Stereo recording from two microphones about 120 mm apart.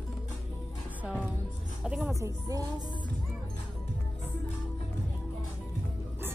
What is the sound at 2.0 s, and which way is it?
Speech, 25° right (ahead or behind).